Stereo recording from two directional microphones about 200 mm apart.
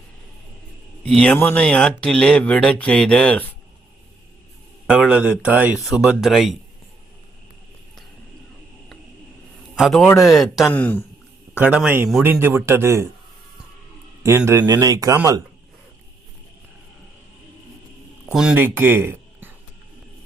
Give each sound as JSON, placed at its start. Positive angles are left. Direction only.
{"t": 1.0, "sound": "speech", "side_deg": 5}
{"t": 4.9, "sound": "speech", "side_deg": -5}
{"t": 9.7, "sound": "a woman's voice", "side_deg": 0}
{"t": 11.6, "sound": "a man's voice", "side_deg": -5}
{"t": 14.3, "sound": "a man's voice", "side_deg": -15}
{"t": 18.3, "sound": "speech", "side_deg": -5}